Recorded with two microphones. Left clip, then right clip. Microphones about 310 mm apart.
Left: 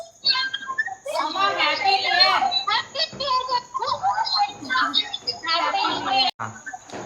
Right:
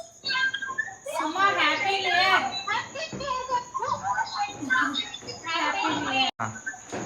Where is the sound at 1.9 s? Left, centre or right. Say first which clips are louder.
Left 4 dB; left.